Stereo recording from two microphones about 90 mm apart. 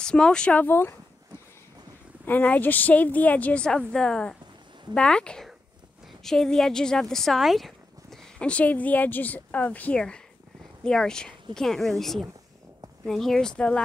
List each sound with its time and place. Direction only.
0.0 s speech: 10° left (ahead or behind); by 0.9 s 25° left (ahead or behind)
2.2 s speech: 20° left (ahead or behind); by 8.2 s centre (ahead or behind)
8.4 s speech: 15° left (ahead or behind)